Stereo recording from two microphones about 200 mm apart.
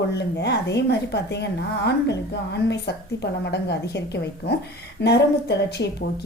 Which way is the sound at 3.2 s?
55° left (ahead or behind).